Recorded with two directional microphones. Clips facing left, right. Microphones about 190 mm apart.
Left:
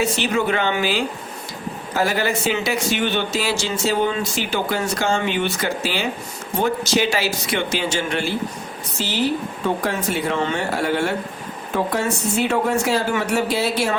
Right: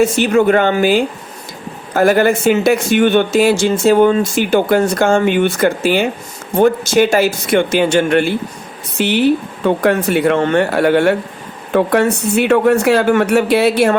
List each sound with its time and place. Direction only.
0.0 s speech: 50° right (ahead or behind)